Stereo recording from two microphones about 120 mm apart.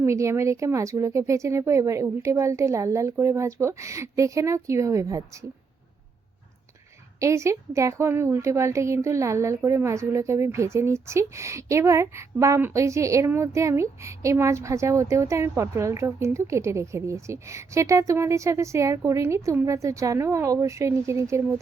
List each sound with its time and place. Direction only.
0.0 s a woman's voice: 25° right (ahead or behind)
7.2 s a woman's voice: 25° right (ahead or behind)